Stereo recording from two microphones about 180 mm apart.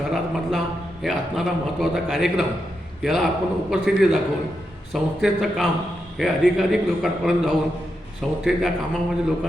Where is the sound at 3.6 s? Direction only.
Centre (ahead or behind).